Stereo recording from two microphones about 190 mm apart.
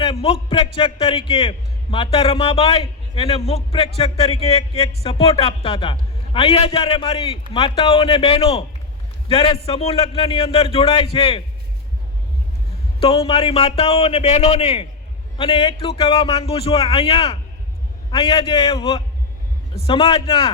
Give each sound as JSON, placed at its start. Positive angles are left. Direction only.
{"t": 0.0, "sound": "a man's voice", "side_deg": 30}
{"t": 13.0, "sound": "a man's voice", "side_deg": 30}